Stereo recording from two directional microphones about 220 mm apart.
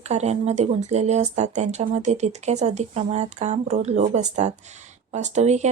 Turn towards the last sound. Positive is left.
turn(degrees=-30)  # may be behind; listen again after turning